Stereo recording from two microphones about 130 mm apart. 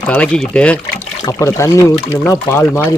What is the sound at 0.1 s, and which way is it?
Speech, 10° left (ahead or behind).